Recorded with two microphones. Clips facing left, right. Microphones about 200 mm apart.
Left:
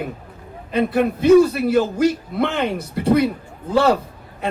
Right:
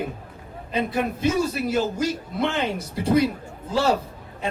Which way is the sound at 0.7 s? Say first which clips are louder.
Left 6 dB; 60° left (ahead or behind).